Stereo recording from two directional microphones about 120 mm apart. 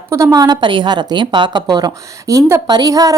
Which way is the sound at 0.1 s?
25° right (ahead or behind).